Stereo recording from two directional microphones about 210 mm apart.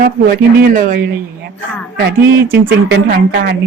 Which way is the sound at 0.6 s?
40° right (ahead or behind).